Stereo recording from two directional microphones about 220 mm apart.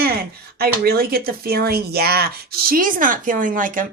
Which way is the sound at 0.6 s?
45° right (ahead or behind).